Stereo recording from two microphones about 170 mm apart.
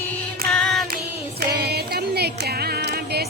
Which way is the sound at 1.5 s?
70° right (ahead or behind).